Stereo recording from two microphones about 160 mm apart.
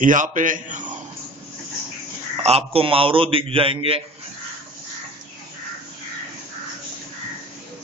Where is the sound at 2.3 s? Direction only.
40° right (ahead or behind).